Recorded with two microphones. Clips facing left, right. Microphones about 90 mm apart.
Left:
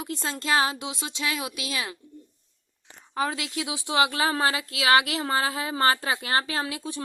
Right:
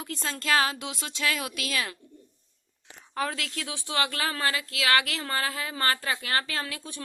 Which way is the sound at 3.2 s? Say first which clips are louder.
Left 3 dB; 5° left (ahead or behind).